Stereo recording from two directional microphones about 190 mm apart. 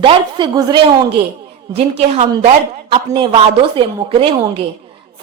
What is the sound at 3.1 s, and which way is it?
A woman's voice, 25° right (ahead or behind).